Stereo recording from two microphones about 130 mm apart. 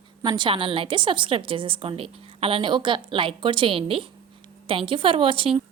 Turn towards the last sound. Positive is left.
turn(degrees=-45)  # may be behind; listen again after turning